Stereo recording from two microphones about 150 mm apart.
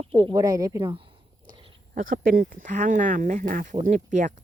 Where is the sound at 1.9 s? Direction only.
65° right (ahead or behind).